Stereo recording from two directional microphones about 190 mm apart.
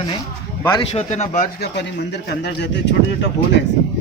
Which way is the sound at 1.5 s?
60° left (ahead or behind).